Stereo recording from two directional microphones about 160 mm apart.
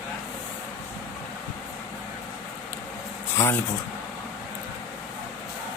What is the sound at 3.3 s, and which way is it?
Speech, 15° left (ahead or behind).